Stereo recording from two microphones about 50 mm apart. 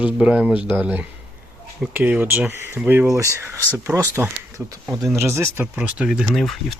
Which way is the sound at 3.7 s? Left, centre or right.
Right.